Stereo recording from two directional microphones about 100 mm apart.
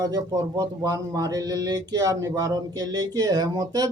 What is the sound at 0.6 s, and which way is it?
Speech, 35° right (ahead or behind).